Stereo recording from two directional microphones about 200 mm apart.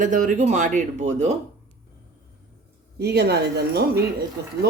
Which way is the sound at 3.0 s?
55° right (ahead or behind).